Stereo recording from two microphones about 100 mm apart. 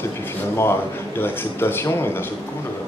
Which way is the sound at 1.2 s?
25° left (ahead or behind).